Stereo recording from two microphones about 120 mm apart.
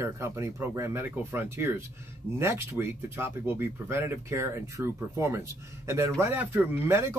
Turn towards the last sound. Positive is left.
turn(degrees=-20)  # may be behind; listen again after turning